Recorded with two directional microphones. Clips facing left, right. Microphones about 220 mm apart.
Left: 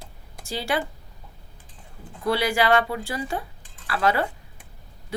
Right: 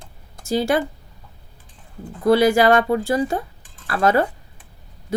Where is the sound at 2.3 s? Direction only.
45° right (ahead or behind).